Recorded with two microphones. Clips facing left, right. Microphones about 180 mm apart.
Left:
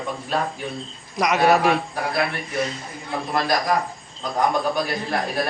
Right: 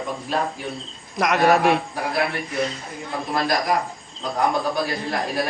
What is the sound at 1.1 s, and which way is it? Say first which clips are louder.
Speech: even; centre (ahead or behind).